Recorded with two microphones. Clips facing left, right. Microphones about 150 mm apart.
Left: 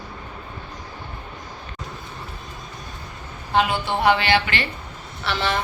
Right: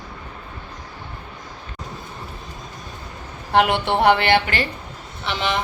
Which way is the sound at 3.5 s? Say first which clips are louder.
Right 3 dB; 70° right (ahead or behind).